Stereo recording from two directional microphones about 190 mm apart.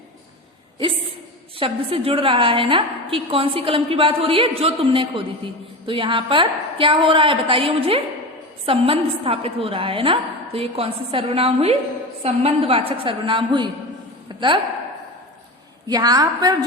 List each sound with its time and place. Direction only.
1.5 s a woman's voice: 30° right (ahead or behind)
15.9 s a woman's voice: 20° right (ahead or behind)